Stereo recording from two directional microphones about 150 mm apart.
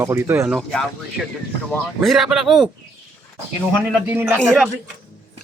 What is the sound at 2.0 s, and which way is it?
Speech, centre (ahead or behind).